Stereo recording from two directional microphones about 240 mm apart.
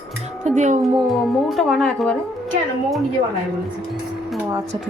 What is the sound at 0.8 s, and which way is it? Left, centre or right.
Speech, centre.